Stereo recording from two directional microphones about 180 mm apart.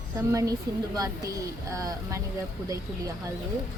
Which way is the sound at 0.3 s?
15° right (ahead or behind).